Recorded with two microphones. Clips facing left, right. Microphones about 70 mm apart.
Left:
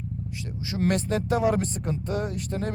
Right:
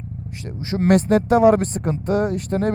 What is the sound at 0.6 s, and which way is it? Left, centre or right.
Speech, right.